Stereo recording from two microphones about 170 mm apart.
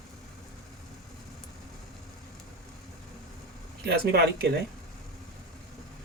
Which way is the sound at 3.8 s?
70° right (ahead or behind).